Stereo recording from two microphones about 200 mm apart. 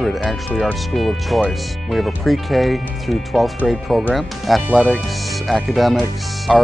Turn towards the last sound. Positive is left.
turn(degrees=0)  # may be behind; listen again after turning